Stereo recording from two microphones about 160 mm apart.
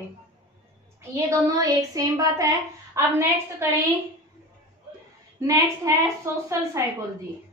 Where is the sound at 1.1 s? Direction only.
20° right (ahead or behind).